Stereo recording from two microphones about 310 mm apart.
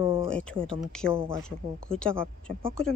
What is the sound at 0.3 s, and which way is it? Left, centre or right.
A woman's voice, centre.